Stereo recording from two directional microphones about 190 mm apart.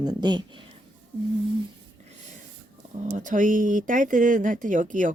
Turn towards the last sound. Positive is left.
turn(degrees=-40)  # may be behind; listen again after turning